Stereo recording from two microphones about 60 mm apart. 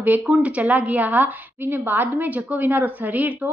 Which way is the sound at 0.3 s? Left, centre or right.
Right.